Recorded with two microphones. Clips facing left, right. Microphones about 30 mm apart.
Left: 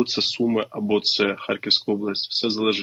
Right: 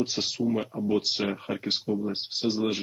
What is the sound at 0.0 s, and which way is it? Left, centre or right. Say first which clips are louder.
Speech: left 6 dB; left.